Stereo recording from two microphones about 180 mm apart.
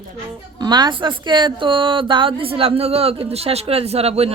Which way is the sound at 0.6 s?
25° right (ahead or behind).